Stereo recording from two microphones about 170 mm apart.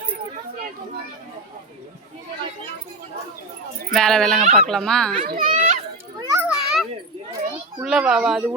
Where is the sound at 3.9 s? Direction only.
5° left (ahead or behind).